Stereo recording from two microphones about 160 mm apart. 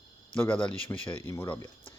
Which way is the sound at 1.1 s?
15° left (ahead or behind).